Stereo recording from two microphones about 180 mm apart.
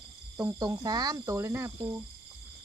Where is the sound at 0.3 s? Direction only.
20° right (ahead or behind).